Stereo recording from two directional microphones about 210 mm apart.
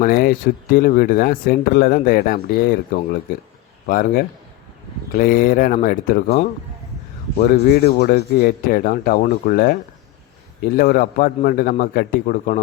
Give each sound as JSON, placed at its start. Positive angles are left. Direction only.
{"t": 0.0, "sound": "speech", "side_deg": 45}
{"t": 10.8, "sound": "speech", "side_deg": 45}